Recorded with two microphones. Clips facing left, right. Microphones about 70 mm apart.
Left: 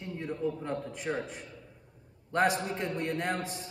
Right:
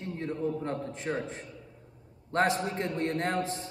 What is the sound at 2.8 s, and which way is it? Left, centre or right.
Speech, right.